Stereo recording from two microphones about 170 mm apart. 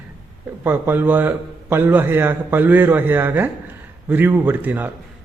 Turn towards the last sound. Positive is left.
turn(degrees=-10)  # may be behind; listen again after turning